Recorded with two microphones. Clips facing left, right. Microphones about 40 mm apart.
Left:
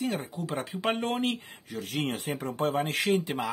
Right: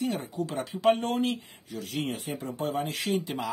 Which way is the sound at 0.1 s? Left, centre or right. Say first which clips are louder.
Right 1 dB; left.